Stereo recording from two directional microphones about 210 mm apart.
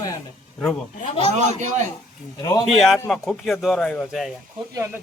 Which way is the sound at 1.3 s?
35° right (ahead or behind).